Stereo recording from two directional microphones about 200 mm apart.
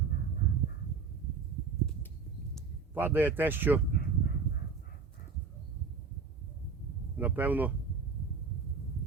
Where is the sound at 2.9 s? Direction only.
10° right (ahead or behind).